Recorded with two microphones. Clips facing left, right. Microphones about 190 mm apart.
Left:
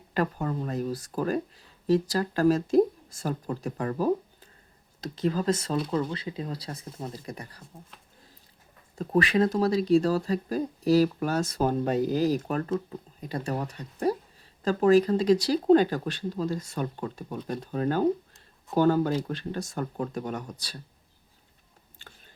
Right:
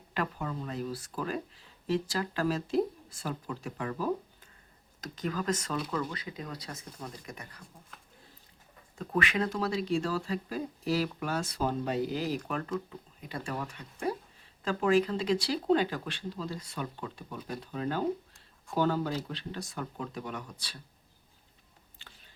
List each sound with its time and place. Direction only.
0.1 s speech: 40° left (ahead or behind)
4.9 s speech: 30° left (ahead or behind)
9.0 s speech: 35° left (ahead or behind)